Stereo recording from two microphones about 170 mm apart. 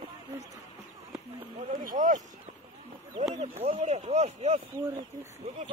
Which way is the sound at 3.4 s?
35° right (ahead or behind).